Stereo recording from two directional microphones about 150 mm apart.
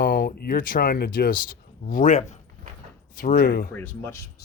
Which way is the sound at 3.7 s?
10° left (ahead or behind).